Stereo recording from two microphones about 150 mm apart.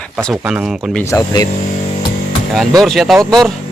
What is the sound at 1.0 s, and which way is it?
Speech, 20° left (ahead or behind).